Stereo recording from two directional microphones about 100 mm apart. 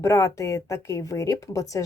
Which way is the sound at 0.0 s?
30° left (ahead or behind).